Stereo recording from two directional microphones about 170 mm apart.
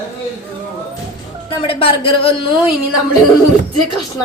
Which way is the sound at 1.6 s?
35° left (ahead or behind).